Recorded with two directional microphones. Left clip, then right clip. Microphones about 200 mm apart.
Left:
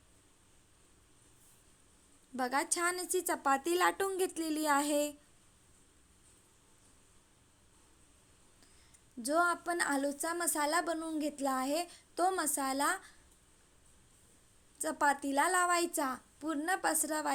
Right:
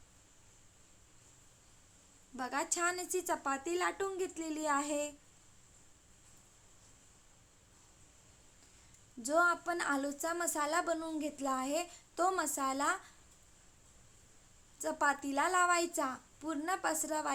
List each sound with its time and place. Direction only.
2.3 s a woman's voice: 25° left (ahead or behind)
9.2 s a woman's voice: 20° left (ahead or behind)
14.8 s a woman's voice: 20° left (ahead or behind)